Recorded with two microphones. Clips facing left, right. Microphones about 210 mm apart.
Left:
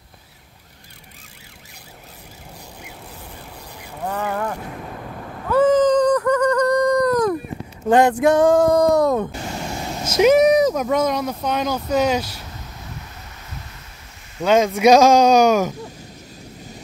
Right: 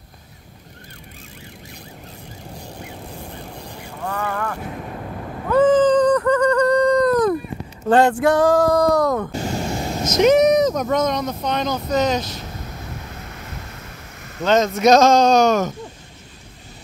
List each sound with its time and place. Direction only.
4.0 s boat: 15° left (ahead or behind)
5.5 s a sound: 10° left (ahead or behind)
7.9 s speech: 10° left (ahead or behind)
8.3 s female singing: 25° left (ahead or behind)
10.0 s speech: 10° left (ahead or behind)
14.4 s speech: 10° left (ahead or behind)